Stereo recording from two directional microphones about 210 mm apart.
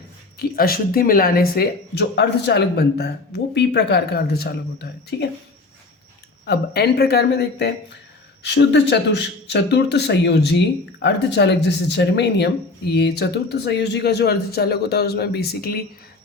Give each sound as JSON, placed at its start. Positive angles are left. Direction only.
{"t": 0.3, "sound": "speech", "side_deg": 45}
{"t": 6.4, "sound": "speech", "side_deg": 50}